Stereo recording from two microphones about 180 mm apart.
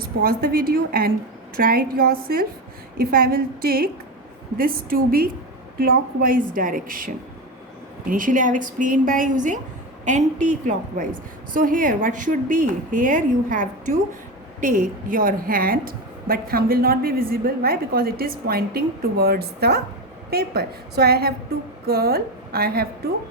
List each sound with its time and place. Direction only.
0.0 s a woman's voice: 55° right (ahead or behind)